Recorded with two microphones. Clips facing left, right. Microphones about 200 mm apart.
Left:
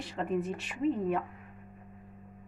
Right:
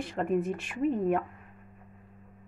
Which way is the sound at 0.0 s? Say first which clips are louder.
Right 4 dB; 50° right (ahead or behind).